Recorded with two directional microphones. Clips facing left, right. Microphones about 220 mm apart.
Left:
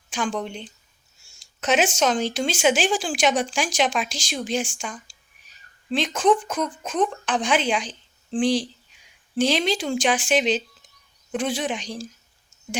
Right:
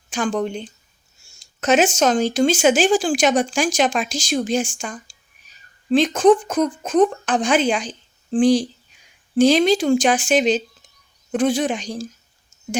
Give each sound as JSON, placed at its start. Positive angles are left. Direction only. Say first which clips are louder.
{"t": 0.1, "sound": "speech", "louder": "right 5 dB", "side_deg": -45}